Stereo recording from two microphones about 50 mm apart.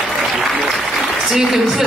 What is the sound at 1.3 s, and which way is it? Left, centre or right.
Speech, centre.